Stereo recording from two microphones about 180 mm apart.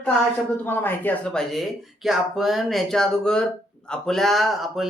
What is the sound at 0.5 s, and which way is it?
Speech, 10° left (ahead or behind).